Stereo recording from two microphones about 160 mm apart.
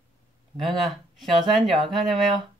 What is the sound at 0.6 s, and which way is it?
Speech, centre (ahead or behind).